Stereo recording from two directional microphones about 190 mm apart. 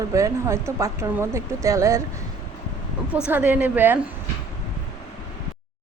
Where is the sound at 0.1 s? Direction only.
15° right (ahead or behind).